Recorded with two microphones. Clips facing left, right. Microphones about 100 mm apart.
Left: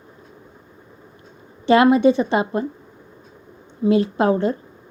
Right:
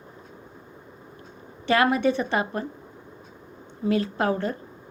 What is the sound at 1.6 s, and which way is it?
A woman's voice, 20° left (ahead or behind).